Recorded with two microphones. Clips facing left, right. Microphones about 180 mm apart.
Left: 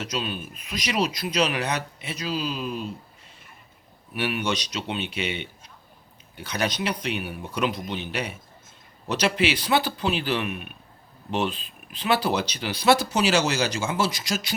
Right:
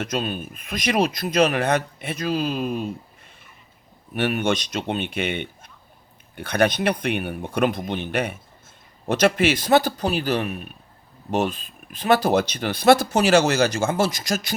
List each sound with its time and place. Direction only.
0.0 s speech: 50° right (ahead or behind)
4.1 s speech: 50° right (ahead or behind)